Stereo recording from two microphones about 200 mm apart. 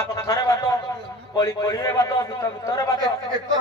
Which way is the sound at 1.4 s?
20° left (ahead or behind).